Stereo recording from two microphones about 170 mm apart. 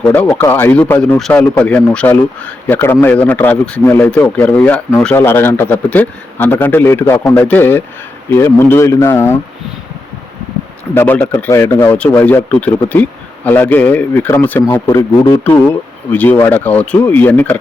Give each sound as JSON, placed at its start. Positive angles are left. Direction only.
{"t": 0.0, "sound": "a man's voice", "side_deg": 10}
{"t": 10.9, "sound": "a man's voice", "side_deg": 10}
{"t": 16.1, "sound": "a man's voice", "side_deg": 10}